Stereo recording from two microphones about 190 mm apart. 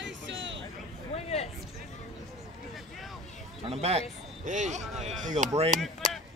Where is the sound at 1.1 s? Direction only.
35° left (ahead or behind).